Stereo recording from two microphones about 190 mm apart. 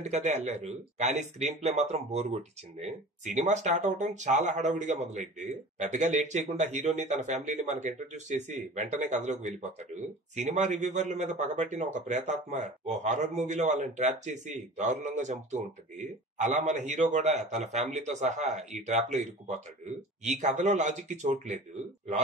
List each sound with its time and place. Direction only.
0.0 s speech: 35° right (ahead or behind)